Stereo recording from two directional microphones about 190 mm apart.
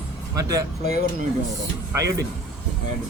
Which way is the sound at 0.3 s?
20° right (ahead or behind).